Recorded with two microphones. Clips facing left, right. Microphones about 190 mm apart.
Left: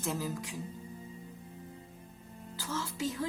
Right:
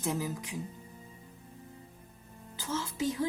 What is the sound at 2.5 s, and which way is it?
Speech, 20° right (ahead or behind).